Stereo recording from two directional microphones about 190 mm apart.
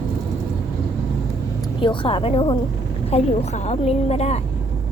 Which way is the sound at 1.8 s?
25° left (ahead or behind).